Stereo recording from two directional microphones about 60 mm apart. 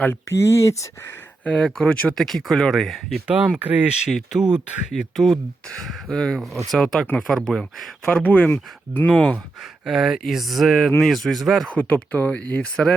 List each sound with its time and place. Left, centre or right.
0.1 s speech: left
1.5 s speech: centre
2.1 s speech: centre
3.2 s speech: right
4.1 s speech: centre
8.1 s speech: left
9.0 s speech: centre
9.8 s speech: centre
11.7 s speech: left